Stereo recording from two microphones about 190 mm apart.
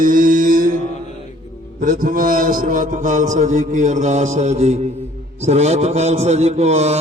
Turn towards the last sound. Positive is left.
turn(degrees=-35)  # may be behind; listen again after turning